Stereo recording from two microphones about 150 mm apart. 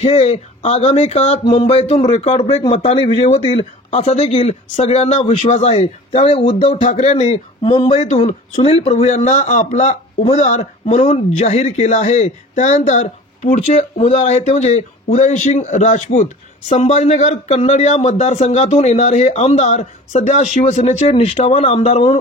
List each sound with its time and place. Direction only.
0.0 s speech: 45° left (ahead or behind)
13.7 s speech: 45° left (ahead or behind)